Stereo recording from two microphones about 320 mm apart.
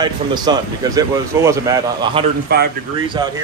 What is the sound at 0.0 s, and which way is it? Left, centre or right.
Speech, centre.